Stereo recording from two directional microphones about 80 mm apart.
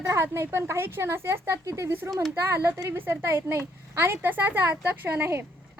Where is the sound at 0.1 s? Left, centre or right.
Right.